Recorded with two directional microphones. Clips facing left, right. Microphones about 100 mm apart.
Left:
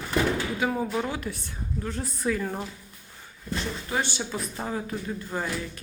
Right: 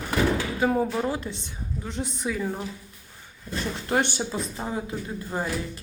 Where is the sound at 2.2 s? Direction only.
5° right (ahead or behind).